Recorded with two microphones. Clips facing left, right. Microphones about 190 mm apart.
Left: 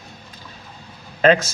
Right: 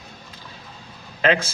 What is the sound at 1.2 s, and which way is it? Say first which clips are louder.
Speech: left 5 dB; 45° left (ahead or behind).